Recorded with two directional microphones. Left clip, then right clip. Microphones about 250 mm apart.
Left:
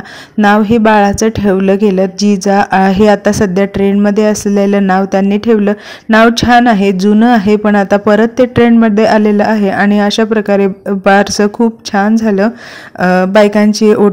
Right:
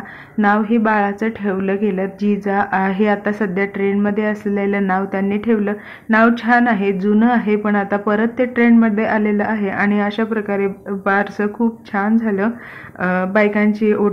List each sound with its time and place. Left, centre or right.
0.4 s speech: left